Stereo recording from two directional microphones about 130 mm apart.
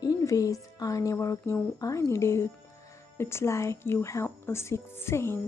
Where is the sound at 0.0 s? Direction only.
25° left (ahead or behind).